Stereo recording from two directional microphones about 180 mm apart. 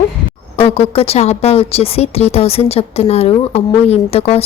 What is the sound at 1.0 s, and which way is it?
Speech, 35° left (ahead or behind).